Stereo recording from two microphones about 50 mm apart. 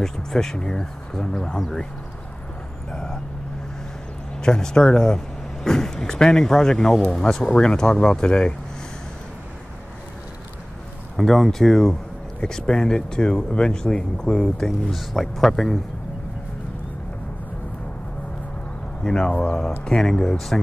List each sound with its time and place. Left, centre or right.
0.0 s speech: centre
2.9 s vehicle: centre
4.4 s speech: centre
11.1 s speech: centre
15.0 s speech: centre
19.0 s speech: centre